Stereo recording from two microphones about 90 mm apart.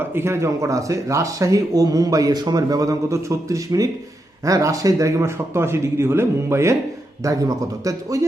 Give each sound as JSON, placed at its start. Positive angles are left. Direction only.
{"t": 0.0, "sound": "speech", "side_deg": -25}